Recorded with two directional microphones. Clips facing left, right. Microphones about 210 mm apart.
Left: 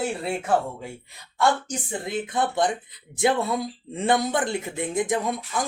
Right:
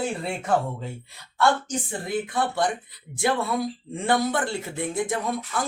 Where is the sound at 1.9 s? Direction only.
20° left (ahead or behind).